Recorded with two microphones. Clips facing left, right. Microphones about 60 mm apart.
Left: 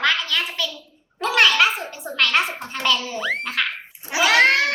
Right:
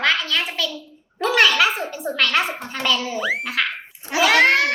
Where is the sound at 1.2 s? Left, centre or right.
Centre.